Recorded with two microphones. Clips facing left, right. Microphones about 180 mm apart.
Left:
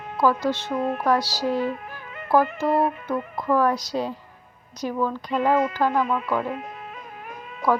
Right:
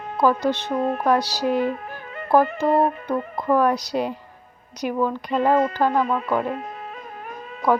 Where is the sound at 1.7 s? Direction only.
40° right (ahead or behind).